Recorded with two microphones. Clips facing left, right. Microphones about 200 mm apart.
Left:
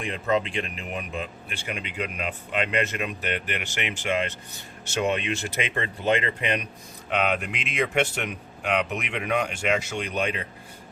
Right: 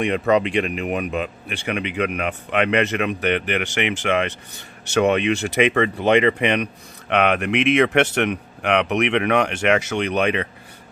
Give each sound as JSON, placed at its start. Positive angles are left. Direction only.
{"t": 0.0, "sound": "speech", "side_deg": -75}